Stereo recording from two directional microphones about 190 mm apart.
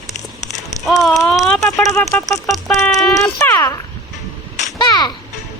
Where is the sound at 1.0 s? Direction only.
Centre (ahead or behind).